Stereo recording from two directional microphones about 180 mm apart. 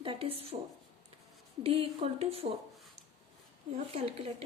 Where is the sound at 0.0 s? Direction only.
30° right (ahead or behind).